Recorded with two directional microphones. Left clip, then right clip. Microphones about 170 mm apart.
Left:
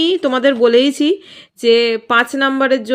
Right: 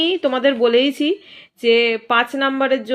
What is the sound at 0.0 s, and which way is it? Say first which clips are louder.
A woman's voice: left 3 dB; 35° left (ahead or behind).